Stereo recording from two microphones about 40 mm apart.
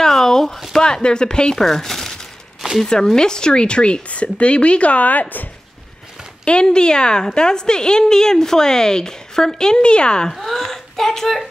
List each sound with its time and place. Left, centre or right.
0.0 s a sound: centre
0.7 s speech: centre
1.6 s speech: centre; by 5.2 s left
6.4 s a woman's voice: left
10.3 s speech: centre